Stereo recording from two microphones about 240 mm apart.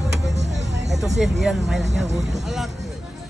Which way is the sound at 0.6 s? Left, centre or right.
Right.